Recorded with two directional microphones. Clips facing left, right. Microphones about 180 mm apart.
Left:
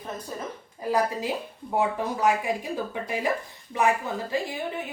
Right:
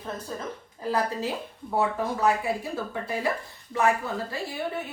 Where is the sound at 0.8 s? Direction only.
15° left (ahead or behind).